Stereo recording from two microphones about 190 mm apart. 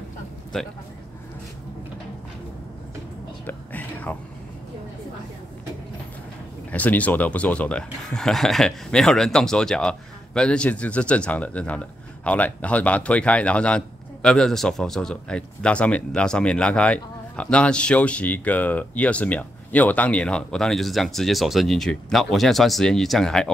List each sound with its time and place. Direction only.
0.5 s speech: centre (ahead or behind)
3.4 s whispering: 10° left (ahead or behind)
6.7 s speech: 10° left (ahead or behind)